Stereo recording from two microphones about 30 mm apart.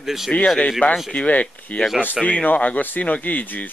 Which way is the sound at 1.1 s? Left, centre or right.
Left.